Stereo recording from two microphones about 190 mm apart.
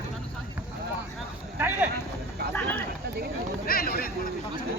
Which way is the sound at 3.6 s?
50° left (ahead or behind).